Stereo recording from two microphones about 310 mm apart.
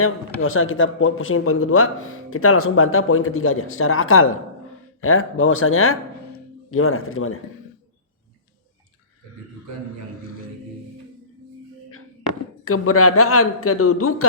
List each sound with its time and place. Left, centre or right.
0.3 s a man's voice: left
12.6 s a man's voice: left